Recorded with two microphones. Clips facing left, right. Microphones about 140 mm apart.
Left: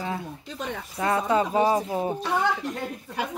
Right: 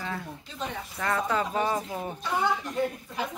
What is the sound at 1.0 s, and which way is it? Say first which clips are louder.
Speech: left 5 dB; 25° left (ahead or behind).